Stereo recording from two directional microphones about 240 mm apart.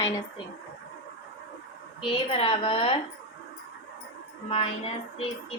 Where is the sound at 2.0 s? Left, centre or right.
Left.